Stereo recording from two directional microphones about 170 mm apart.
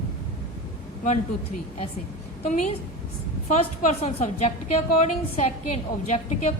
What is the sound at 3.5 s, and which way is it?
A woman's voice, 40° left (ahead or behind).